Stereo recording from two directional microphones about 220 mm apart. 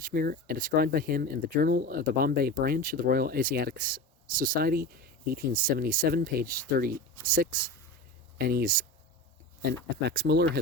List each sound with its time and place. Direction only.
0.0 s speech: 40° right (ahead or behind)
10.1 s speech: 50° right (ahead or behind)